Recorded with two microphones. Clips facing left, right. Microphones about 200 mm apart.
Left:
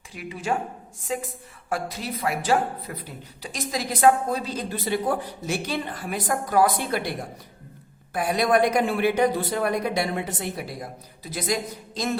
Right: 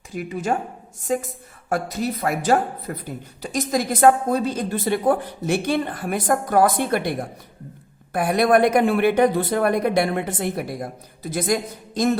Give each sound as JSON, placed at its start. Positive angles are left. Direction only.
{"t": 0.1, "sound": "a woman's voice", "side_deg": -45}